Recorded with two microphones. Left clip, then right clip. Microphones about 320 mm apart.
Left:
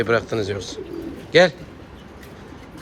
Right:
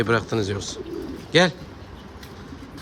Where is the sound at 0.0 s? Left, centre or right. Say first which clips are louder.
Left 2 dB; centre.